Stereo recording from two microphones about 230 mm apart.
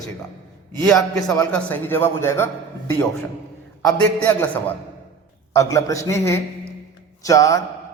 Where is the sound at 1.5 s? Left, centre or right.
Centre.